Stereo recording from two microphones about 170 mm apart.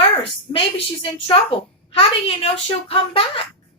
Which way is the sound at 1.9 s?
30° left (ahead or behind).